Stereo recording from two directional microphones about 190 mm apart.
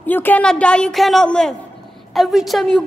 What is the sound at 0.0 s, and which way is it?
A woman's voice, 10° left (ahead or behind).